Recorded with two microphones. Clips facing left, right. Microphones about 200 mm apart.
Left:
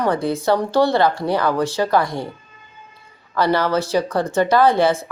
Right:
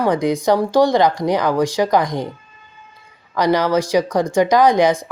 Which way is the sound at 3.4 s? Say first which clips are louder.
Right 2 dB; 15° right (ahead or behind).